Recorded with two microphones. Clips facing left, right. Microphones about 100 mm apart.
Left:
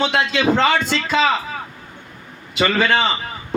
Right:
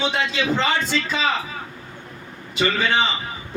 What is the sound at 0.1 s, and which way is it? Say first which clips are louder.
A man's voice: left 5 dB; 80° left.